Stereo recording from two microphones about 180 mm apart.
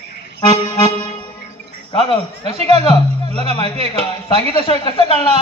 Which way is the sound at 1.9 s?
30° left (ahead or behind).